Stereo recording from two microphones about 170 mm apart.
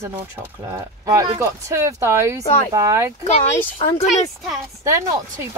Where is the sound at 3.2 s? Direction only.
40° left (ahead or behind).